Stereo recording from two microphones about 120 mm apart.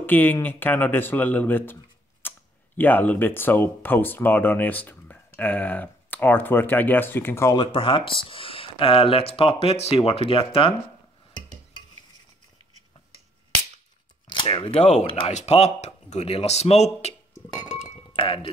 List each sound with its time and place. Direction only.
0.0 s speech: 15° left (ahead or behind)
7.5 s speech: 45° left (ahead or behind)
11.3 s stir: 40° left (ahead or behind)
14.2 s a sound: 45° left (ahead or behind)
14.8 s speech: 65° left (ahead or behind)
15.0 s speech: 45° left (ahead or behind)
15.3 s speech: 65° left (ahead or behind)
18.1 s speech: 50° left (ahead or behind)